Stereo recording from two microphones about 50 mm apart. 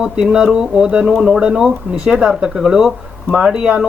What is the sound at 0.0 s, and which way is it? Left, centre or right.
Speech, centre.